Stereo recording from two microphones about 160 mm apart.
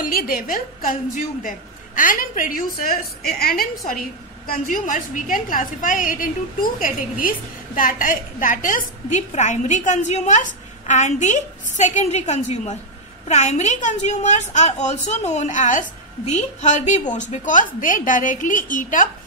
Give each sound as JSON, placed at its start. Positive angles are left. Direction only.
{"t": 0.0, "sound": "a woman's voice", "side_deg": 60}
{"t": 4.5, "sound": "a woman's voice", "side_deg": 55}